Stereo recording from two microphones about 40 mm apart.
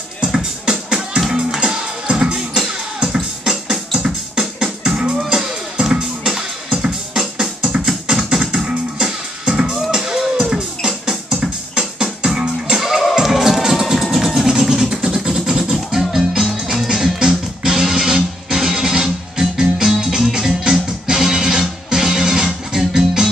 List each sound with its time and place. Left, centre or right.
0.2 s music: centre
2.0 s music: right
8.5 s music: right
14.0 s vehicle: centre
15.1 s music: centre